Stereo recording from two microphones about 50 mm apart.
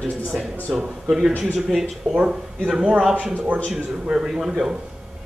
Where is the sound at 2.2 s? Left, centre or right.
Centre.